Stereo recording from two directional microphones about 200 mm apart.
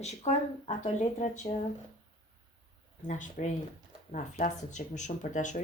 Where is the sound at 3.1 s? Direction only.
35° left (ahead or behind).